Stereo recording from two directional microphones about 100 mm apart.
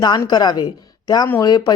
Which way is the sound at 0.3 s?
45° left (ahead or behind).